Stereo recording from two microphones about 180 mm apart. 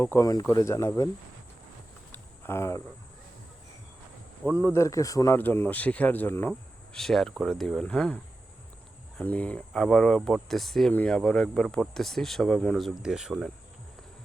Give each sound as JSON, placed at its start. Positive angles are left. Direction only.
{"t": 0.0, "sound": "speech", "side_deg": 15}
{"t": 2.1, "sound": "a sound", "side_deg": 15}
{"t": 4.6, "sound": "speech", "side_deg": 15}